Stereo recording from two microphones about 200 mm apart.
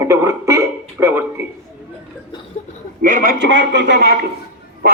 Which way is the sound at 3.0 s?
45° right (ahead or behind).